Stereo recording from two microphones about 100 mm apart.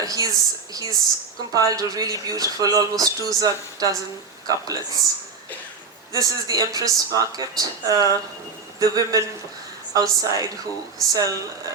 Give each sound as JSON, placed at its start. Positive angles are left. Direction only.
{"t": 0.0, "sound": "speech", "side_deg": -35}
{"t": 6.1, "sound": "speech", "side_deg": -35}